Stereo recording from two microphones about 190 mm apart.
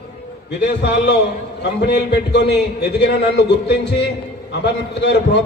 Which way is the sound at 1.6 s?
60° left (ahead or behind).